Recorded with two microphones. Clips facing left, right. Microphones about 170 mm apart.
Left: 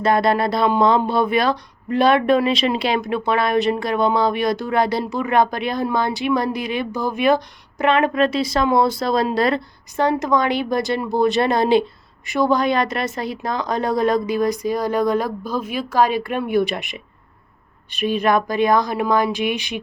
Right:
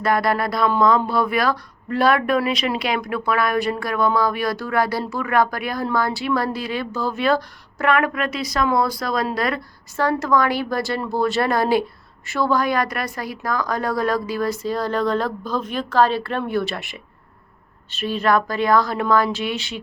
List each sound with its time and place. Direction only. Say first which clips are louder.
0.0 s speech: left 3 dB; 25° left (ahead or behind)